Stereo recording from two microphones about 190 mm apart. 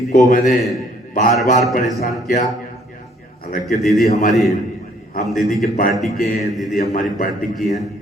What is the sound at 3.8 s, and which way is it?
A man's voice, centre (ahead or behind).